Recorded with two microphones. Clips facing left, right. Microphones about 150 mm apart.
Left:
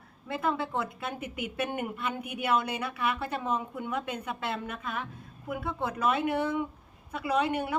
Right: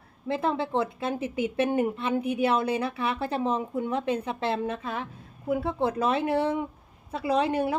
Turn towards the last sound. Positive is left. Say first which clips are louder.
# right 3 dB
turn(degrees=-30)  # may be behind; listen again after turning